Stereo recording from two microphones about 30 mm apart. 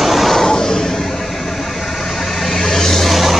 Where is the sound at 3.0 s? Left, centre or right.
Centre.